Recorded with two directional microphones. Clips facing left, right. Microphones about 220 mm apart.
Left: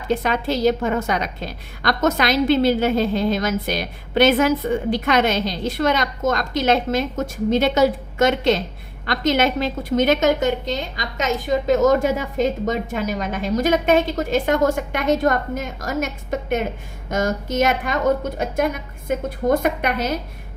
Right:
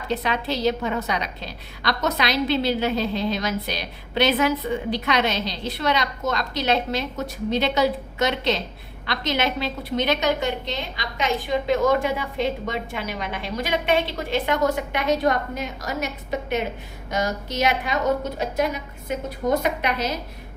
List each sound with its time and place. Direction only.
0.1 s a woman's voice: 50° left (ahead or behind)